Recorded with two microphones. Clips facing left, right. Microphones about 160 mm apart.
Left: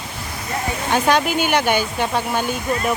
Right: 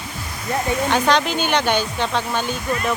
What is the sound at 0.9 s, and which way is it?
Speech, 10° left (ahead or behind).